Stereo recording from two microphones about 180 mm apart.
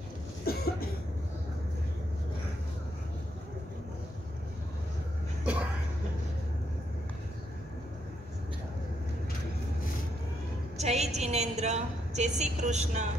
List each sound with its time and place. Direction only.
0.5 s cough: 60° left (ahead or behind)
5.4 s a sound: 5° right (ahead or behind)
10.8 s a woman's voice: 35° right (ahead or behind)